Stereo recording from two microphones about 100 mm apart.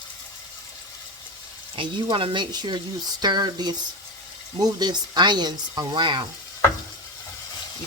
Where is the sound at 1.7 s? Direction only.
55° right (ahead or behind).